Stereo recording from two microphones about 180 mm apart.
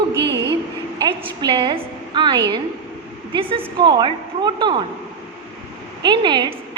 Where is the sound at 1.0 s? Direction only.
25° right (ahead or behind).